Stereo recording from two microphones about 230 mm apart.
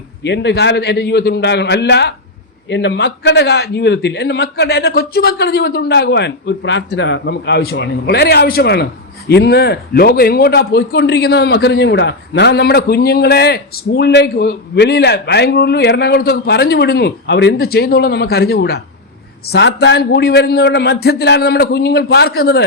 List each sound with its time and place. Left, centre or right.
0.2 s a man's voice: left